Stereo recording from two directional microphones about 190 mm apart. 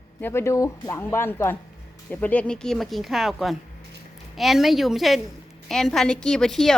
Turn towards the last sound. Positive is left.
turn(degrees=0)  # may be behind; listen again after turning